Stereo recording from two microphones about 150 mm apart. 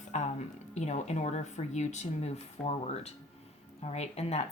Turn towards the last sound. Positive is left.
turn(degrees=45)  # may be behind; listen again after turning